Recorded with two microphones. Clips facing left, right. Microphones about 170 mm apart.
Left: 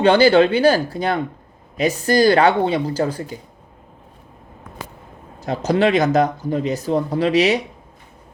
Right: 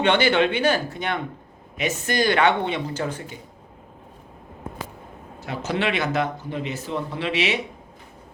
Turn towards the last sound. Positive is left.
turn(degrees=40)  # may be behind; listen again after turning